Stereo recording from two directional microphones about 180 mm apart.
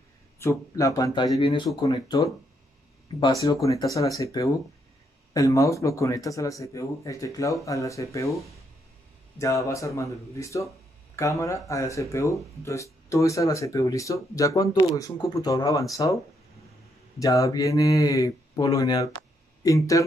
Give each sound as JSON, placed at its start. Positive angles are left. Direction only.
{"t": 0.4, "sound": "speech", "side_deg": 15}
{"t": 9.4, "sound": "speech", "side_deg": 15}
{"t": 17.2, "sound": "speech", "side_deg": 20}